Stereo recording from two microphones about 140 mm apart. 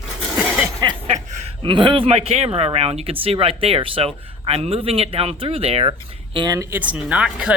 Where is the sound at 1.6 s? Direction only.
35° right (ahead or behind).